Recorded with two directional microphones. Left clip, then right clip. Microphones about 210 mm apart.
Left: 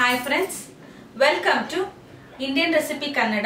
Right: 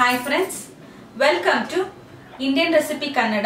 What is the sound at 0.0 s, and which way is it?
A woman's voice, centre (ahead or behind).